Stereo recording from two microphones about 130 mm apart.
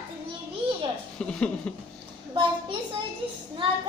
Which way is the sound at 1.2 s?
10° left (ahead or behind).